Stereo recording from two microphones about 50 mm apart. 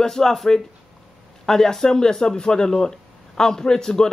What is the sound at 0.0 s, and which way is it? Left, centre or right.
Speech, centre.